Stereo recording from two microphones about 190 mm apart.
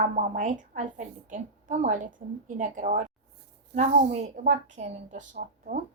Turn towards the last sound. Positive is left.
turn(degrees=-45)  # may be behind; listen again after turning